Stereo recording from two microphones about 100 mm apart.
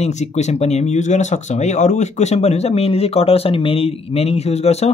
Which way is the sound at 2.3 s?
90° left.